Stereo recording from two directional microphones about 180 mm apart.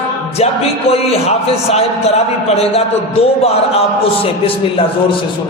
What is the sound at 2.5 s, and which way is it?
A man's voice, 35° left (ahead or behind).